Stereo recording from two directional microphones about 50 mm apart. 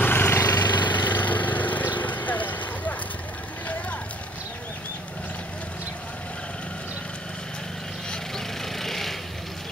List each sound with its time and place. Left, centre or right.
0.0 s vehicle: left
8.7 s vehicle: centre